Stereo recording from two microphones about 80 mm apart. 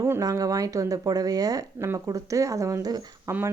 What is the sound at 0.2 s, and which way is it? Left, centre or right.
Speech, right.